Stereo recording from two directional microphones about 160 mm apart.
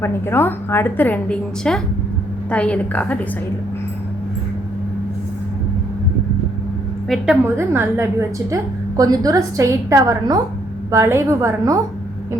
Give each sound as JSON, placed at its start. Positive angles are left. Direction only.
{"t": 0.0, "sound": "a woman's voice", "side_deg": 15}
{"t": 7.4, "sound": "a woman's voice", "side_deg": -15}